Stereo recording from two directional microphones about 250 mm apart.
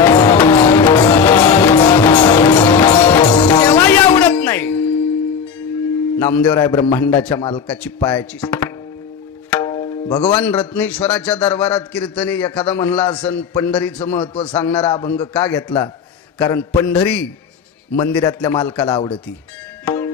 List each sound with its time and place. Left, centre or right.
0.0 s music: centre
6.1 s a man's voice: centre
9.5 s tabla: centre
10.3 s a man's voice: centre
14.2 s a man's voice: left
14.6 s a man's voice: centre
14.9 s a man's voice: centre
19.8 s music: centre